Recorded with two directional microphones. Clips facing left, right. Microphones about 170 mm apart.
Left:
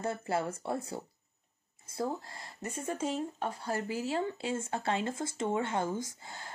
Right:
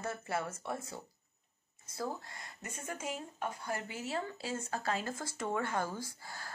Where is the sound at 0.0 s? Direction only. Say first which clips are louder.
Left 5 dB; 30° left (ahead or behind).